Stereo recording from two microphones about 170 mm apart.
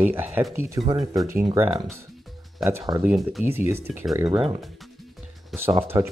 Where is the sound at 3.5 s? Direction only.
15° right (ahead or behind).